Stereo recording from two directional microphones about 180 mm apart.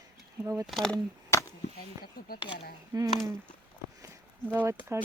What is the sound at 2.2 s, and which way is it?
Speech, 55° left (ahead or behind).